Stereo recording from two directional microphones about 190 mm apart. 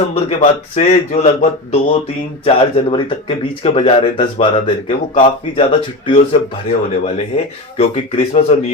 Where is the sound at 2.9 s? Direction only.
25° left (ahead or behind).